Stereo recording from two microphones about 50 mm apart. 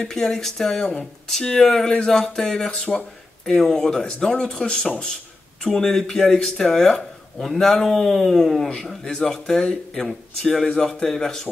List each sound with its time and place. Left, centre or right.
0.0 s speech: centre